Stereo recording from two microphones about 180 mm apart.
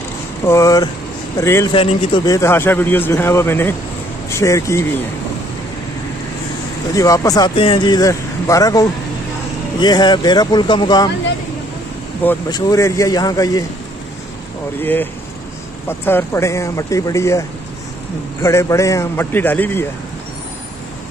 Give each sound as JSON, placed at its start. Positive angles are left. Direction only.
{"t": 0.5, "sound": "a man's voice", "side_deg": 15}
{"t": 1.7, "sound": "a man's voice", "side_deg": 30}
{"t": 6.9, "sound": "speech", "side_deg": 20}
{"t": 12.4, "sound": "speech", "side_deg": 20}
{"t": 14.8, "sound": "a man's voice", "side_deg": 10}